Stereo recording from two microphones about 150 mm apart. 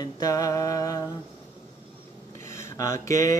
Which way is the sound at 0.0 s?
25° left (ahead or behind).